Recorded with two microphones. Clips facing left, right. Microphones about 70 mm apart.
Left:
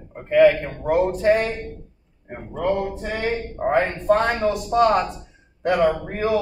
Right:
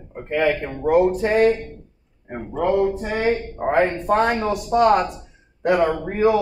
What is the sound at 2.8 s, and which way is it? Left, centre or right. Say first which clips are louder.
A man's voice: right 5 dB; centre.